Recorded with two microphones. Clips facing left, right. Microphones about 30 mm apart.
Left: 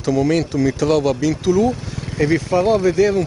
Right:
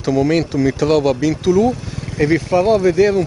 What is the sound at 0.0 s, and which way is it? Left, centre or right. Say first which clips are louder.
Speech: right 2 dB; centre.